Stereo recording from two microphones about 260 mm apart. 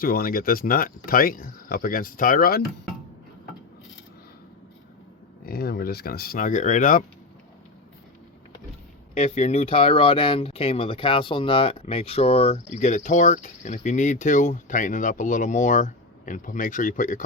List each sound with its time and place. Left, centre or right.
0.0 s speech: left
5.5 s speech: left
9.1 s speech: left